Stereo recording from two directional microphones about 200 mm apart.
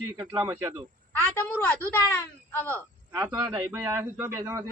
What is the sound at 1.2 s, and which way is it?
A woman's voice, 10° left (ahead or behind).